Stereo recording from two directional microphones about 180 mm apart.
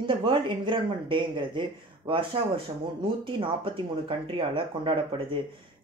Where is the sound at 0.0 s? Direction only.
30° right (ahead or behind).